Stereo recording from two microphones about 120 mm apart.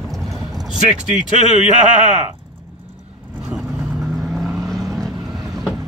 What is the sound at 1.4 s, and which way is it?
Speech, 90° right.